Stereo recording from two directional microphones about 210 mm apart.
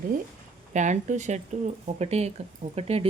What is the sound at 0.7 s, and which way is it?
Speech, 35° right (ahead or behind).